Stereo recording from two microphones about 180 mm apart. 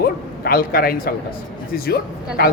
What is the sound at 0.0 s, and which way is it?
Speech, 55° left (ahead or behind).